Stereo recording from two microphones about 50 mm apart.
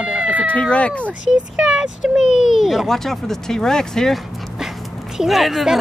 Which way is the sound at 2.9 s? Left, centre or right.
Centre.